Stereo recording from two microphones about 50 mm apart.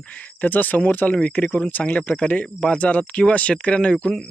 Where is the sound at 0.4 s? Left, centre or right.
Left.